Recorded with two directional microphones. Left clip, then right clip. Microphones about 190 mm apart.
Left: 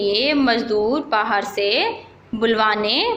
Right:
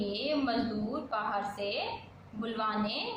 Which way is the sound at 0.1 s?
40° left (ahead or behind).